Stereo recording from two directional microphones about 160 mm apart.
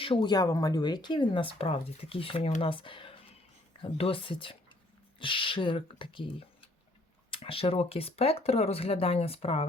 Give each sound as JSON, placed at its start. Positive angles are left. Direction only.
{"t": 0.0, "sound": "speech", "side_deg": 30}